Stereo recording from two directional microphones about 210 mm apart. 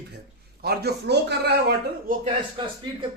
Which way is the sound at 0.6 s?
50° right (ahead or behind).